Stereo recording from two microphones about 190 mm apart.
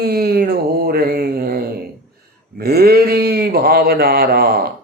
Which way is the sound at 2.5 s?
55° right (ahead or behind).